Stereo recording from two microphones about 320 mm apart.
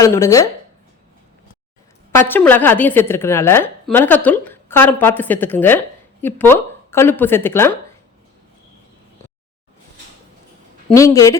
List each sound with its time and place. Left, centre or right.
0.0 s a woman's voice: centre
2.1 s a woman's voice: centre
10.8 s a woman's voice: centre